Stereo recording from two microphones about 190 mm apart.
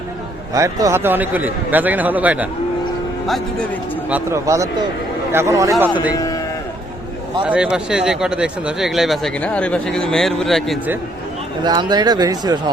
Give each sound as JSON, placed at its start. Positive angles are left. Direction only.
{"t": 0.5, "sound": "a man's voice", "side_deg": -15}
{"t": 4.1, "sound": "a man's voice", "side_deg": -15}
{"t": 6.1, "sound": "a man's voice", "side_deg": 20}
{"t": 7.4, "sound": "speech", "side_deg": -5}
{"t": 11.6, "sound": "speech", "side_deg": -25}